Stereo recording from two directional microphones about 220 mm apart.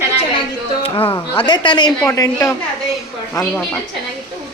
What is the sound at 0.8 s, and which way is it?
A woman's voice, 25° left (ahead or behind).